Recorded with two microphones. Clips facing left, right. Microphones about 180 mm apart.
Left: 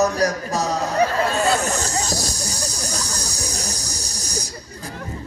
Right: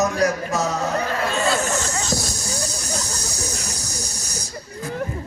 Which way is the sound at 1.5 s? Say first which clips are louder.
Left 1 dB; 35° left (ahead or behind).